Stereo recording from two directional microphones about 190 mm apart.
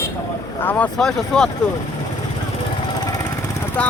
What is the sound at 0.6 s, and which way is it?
Speech, 10° left (ahead or behind).